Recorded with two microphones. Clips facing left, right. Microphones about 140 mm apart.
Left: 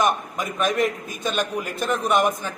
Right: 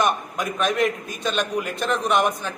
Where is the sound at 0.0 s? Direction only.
Centre (ahead or behind).